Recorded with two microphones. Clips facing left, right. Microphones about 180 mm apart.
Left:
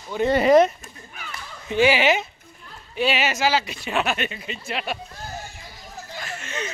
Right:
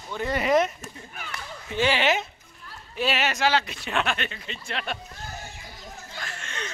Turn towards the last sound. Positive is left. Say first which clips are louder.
# left 5 dB
turn(degrees=5)  # may be behind; listen again after turning